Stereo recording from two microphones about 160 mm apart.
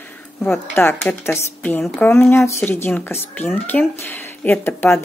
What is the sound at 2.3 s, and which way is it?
Speech, 15° left (ahead or behind).